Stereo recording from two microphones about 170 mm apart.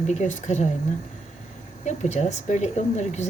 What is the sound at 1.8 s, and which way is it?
A woman's voice, 40° left (ahead or behind).